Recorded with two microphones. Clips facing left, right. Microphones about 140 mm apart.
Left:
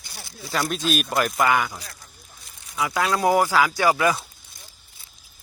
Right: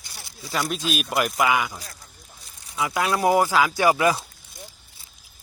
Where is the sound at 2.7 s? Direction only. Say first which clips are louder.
Even; 25° right (ahead or behind).